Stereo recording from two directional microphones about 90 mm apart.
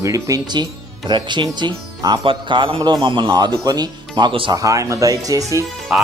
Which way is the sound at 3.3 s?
50° right (ahead or behind).